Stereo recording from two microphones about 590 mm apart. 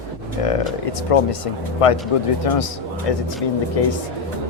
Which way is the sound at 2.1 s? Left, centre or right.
Left.